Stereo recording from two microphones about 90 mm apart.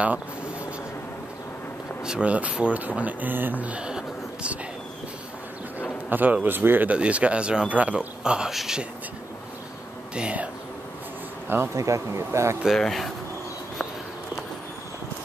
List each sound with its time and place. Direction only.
2.0 s speech: 10° right (ahead or behind)
6.0 s speech: 20° right (ahead or behind); by 8.8 s 5° right (ahead or behind)
10.1 s speech: 15° right (ahead or behind)
11.4 s speech: 25° right (ahead or behind)
12.6 s speech: 5° left (ahead or behind)